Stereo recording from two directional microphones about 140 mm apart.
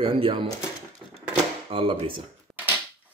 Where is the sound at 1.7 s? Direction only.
40° right (ahead or behind).